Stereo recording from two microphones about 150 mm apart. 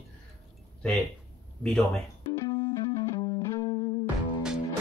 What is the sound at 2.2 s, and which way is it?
Music, 25° left (ahead or behind).